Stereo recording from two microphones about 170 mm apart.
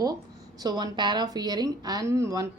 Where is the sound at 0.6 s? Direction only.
25° right (ahead or behind).